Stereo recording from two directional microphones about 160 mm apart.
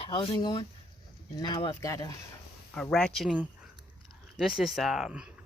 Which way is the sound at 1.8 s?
20° left (ahead or behind).